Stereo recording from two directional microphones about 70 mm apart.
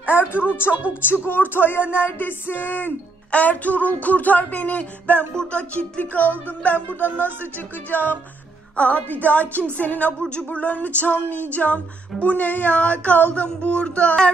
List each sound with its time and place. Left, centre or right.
0.3 s speech: left
1.0 s music: left
8.7 s a woman's voice: centre
9.2 s music: left